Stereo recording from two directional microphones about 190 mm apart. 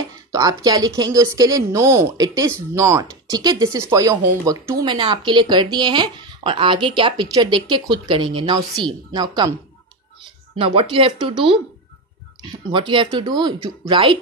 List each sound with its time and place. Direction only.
0.3 s music: 20° right (ahead or behind)
0.7 s a woman's voice: 20° right (ahead or behind)
10.6 s a woman's voice: 25° right (ahead or behind)
12.4 s a woman's voice: 25° right (ahead or behind)